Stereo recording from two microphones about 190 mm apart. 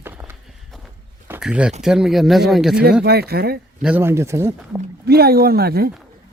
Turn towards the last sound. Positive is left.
turn(degrees=-55)  # may be behind; listen again after turning